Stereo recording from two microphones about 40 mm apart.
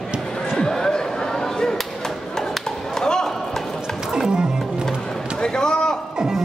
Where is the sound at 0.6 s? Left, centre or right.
Centre.